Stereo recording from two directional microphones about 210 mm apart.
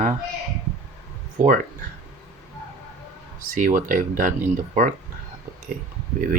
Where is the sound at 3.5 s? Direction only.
40° right (ahead or behind).